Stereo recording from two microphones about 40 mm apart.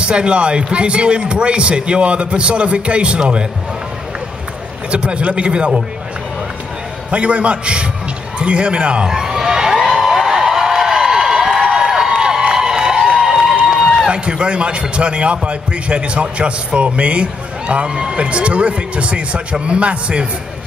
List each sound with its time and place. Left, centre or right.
0.0 s a man's voice: right
4.9 s a man's voice: right
7.1 s a man's voice: right
9.1 s a sound: centre
14.0 s a man's voice: right